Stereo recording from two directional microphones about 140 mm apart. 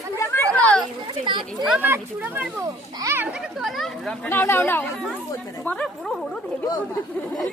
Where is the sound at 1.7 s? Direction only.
15° right (ahead or behind).